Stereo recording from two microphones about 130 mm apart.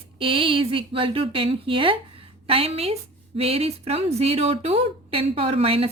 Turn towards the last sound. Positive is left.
turn(degrees=-45)  # may be behind; listen again after turning